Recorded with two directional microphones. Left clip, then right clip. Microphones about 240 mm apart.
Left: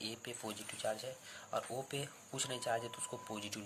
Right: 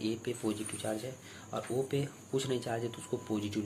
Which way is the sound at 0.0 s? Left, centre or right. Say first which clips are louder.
Right 9 dB; left.